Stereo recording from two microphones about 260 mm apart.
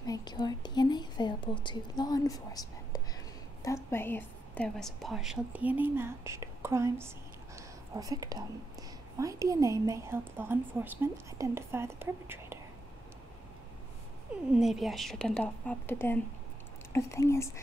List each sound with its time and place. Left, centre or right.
0.0 s a woman's voice: centre
14.5 s a woman's voice: centre